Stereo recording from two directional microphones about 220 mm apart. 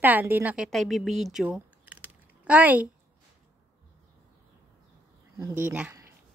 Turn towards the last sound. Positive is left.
turn(degrees=-10)  # may be behind; listen again after turning